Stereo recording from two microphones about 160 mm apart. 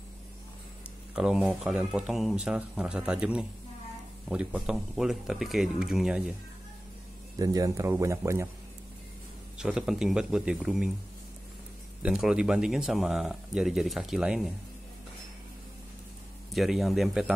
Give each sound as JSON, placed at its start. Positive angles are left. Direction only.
{"t": 1.1, "sound": "speech", "side_deg": -5}
{"t": 7.3, "sound": "speech", "side_deg": -25}
{"t": 9.6, "sound": "speech", "side_deg": -5}
{"t": 12.0, "sound": "speech", "side_deg": -5}
{"t": 16.5, "sound": "speech", "side_deg": 0}